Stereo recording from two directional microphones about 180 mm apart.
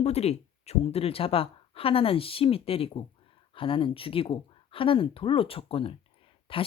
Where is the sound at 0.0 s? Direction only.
35° left (ahead or behind).